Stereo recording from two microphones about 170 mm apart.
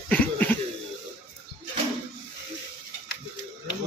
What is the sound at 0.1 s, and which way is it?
Cough, 10° left (ahead or behind).